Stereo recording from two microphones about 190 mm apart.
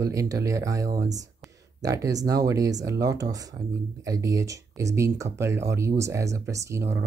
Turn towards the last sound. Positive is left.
turn(degrees=-15)  # may be behind; listen again after turning